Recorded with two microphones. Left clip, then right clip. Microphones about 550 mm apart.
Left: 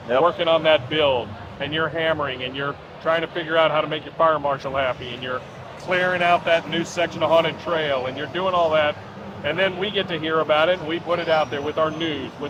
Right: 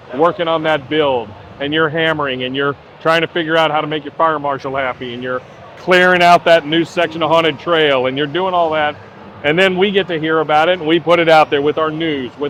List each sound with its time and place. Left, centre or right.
0.3 s speech: right
5.9 s speech: right
9.4 s speech: right